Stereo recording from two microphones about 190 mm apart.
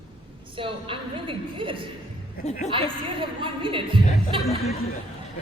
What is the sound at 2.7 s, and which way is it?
A man's voice, 25° right (ahead or behind).